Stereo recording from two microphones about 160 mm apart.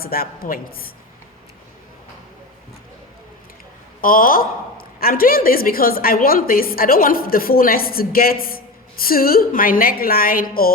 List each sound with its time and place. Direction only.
0.0 s a woman's voice: 70° left (ahead or behind)
4.0 s a woman's voice: 60° left (ahead or behind)